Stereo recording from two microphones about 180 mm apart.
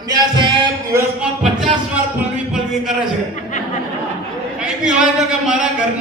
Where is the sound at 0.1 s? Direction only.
25° right (ahead or behind).